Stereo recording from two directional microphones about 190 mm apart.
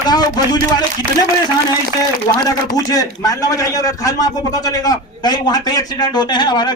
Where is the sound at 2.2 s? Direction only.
20° left (ahead or behind).